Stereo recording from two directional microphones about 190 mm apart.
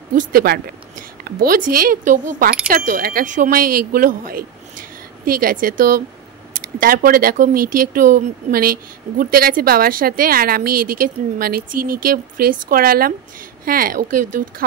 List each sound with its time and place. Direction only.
0.1 s speech: 50° right (ahead or behind)